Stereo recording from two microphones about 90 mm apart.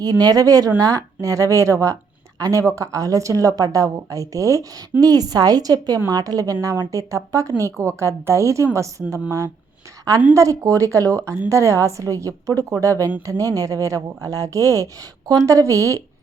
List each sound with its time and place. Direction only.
0.0 s a woman's voice: 45° right (ahead or behind)
10.3 s a woman's voice: 35° right (ahead or behind)